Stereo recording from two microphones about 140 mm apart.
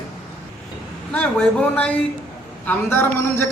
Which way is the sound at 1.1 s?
10° left (ahead or behind).